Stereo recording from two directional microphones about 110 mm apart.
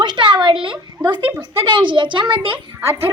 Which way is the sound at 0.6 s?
45° right (ahead or behind).